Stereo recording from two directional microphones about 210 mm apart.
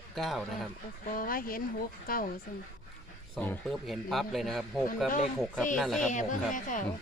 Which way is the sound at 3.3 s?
10° left (ahead or behind).